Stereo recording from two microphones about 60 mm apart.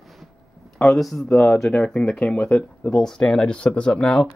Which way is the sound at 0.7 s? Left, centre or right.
Centre.